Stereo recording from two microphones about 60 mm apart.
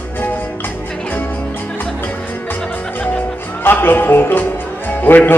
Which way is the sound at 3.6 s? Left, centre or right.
Left.